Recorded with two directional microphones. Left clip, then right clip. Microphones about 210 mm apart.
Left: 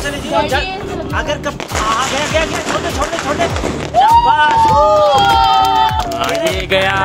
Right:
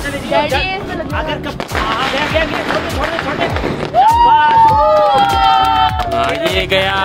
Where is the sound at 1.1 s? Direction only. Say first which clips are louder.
Left 3 dB; 25° left (ahead or behind).